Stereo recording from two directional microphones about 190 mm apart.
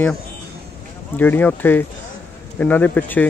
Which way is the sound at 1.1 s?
10° left (ahead or behind).